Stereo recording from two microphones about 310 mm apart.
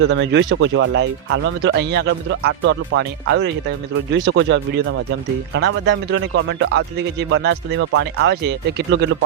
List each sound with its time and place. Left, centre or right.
0.1 s speech: right